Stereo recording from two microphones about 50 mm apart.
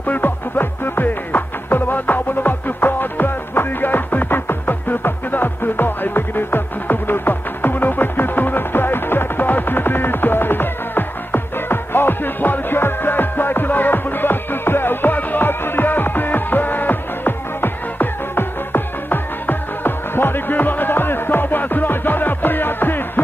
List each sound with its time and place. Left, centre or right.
0.0 s music: left